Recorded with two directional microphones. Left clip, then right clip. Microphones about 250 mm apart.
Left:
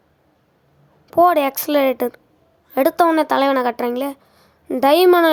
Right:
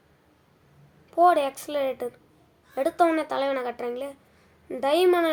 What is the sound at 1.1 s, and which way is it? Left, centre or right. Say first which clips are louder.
A woman's voice: left 6 dB; left.